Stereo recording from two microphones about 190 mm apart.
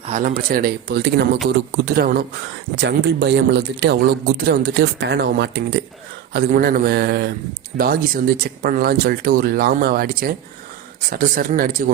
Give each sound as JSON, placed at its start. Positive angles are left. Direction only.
{"t": 0.0, "sound": "speech", "side_deg": -40}
{"t": 1.5, "sound": "speech", "side_deg": -55}
{"t": 2.8, "sound": "speech", "side_deg": -65}
{"t": 6.3, "sound": "speech", "side_deg": -50}